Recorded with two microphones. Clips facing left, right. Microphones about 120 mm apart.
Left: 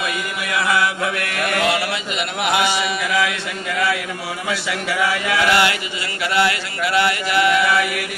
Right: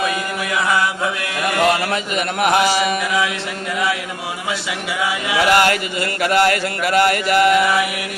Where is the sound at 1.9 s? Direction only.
45° right (ahead or behind).